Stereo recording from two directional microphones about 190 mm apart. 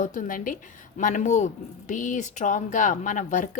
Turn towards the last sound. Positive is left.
turn(degrees=45)  # may be behind; listen again after turning